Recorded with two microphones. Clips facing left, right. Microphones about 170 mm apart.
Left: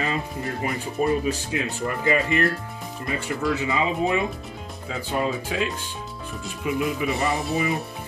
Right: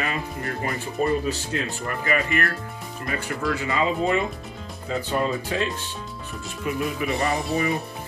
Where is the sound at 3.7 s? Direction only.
10° left (ahead or behind).